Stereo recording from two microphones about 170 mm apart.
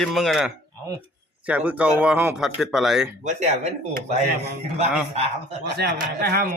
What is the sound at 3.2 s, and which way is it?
Speech, 40° right (ahead or behind).